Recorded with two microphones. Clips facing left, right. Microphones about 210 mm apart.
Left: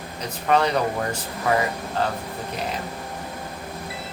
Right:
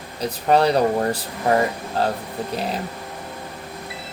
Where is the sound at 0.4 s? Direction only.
35° right (ahead or behind).